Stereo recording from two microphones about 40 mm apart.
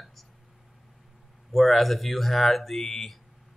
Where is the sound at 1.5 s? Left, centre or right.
Centre.